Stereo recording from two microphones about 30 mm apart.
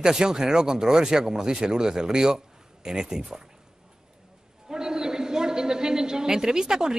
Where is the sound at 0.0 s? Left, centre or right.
Right.